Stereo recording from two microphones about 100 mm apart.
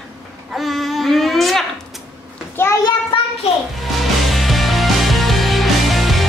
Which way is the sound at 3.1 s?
65° left (ahead or behind).